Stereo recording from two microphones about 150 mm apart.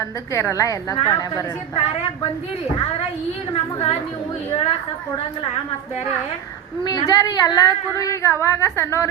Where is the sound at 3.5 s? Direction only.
40° left (ahead or behind).